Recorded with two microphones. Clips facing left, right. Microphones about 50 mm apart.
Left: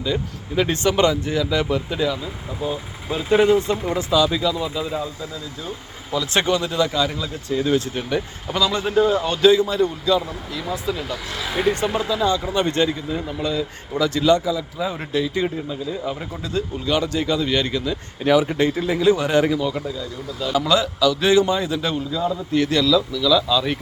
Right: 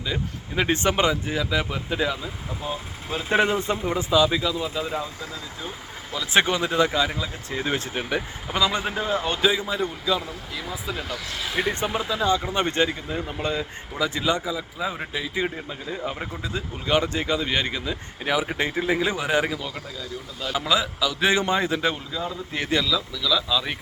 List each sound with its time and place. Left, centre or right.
0.0 s a man's voice: centre
3.2 s a man's voice: right; by 5.0 s centre
6.1 s a man's voice: centre
11.6 s speech: right
14.0 s speech: centre
15.7 s speech: right
16.8 s speech: right
18.3 s speech: centre
19.2 s a man's voice: centre; by 21.9 s right
21.9 s a man's voice: centre
22.5 s a man's voice: right